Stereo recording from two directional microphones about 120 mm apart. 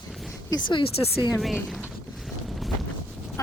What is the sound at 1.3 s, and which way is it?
Speech, centre (ahead or behind).